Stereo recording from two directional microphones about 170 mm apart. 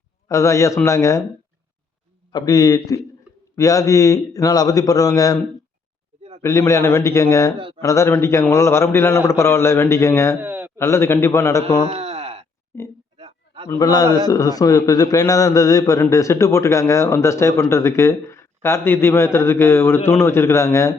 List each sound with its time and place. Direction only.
0.3 s a man's voice: 20° left (ahead or behind)
2.3 s a man's voice: 20° left (ahead or behind)
6.4 s a man's voice: 15° left (ahead or behind)
10.4 s a sound: 10° right (ahead or behind)
10.8 s a man's voice: 15° left (ahead or behind)
11.9 s a sound: 35° right (ahead or behind)
13.7 s a man's voice: 20° left (ahead or behind)